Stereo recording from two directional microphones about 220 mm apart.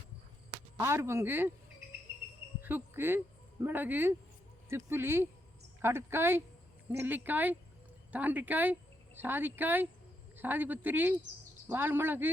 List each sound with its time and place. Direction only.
0.8 s speech: 10° right (ahead or behind)
2.6 s cricket: 10° right (ahead or behind)
3.6 s speech: 10° right (ahead or behind)